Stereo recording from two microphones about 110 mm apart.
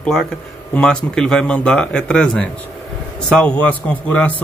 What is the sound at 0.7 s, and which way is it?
Speech, 5° left (ahead or behind).